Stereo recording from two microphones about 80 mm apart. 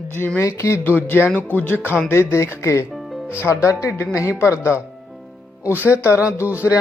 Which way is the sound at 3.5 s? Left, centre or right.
Left.